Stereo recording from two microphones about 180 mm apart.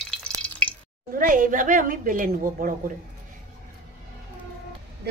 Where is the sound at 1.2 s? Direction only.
50° right (ahead or behind).